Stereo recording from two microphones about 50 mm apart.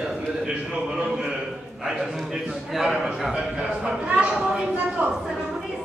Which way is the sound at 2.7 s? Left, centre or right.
Centre.